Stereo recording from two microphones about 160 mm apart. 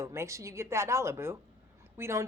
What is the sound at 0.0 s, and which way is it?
Speech, 15° right (ahead or behind).